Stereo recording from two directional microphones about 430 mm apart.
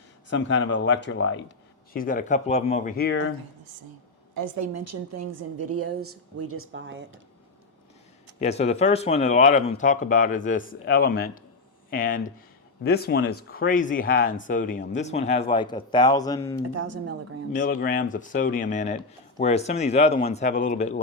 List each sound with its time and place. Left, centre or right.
0.3 s speech: left
3.6 s a woman's voice: right
4.4 s a woman's voice: right
8.4 s speech: centre
16.7 s a woman's voice: right
17.6 s speech: centre